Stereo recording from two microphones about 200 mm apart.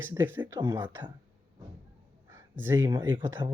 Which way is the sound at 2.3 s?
10° right (ahead or behind).